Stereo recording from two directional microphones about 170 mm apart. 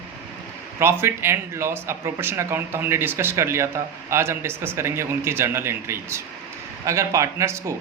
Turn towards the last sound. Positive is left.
turn(degrees=-15)  # may be behind; listen again after turning